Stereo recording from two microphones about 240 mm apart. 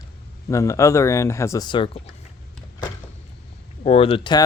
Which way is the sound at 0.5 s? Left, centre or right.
Centre.